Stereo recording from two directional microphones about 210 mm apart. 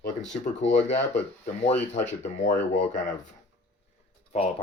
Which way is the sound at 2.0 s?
35° left (ahead or behind).